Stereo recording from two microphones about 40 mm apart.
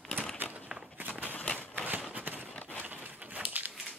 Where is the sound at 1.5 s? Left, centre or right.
Left.